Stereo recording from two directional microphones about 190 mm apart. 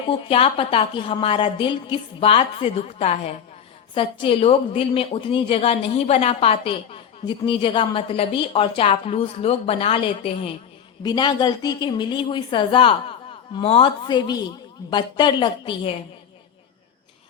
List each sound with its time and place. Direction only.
0.1 s a woman's voice: 30° left (ahead or behind)